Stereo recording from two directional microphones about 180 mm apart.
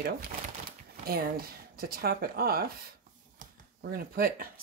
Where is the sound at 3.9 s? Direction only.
55° right (ahead or behind).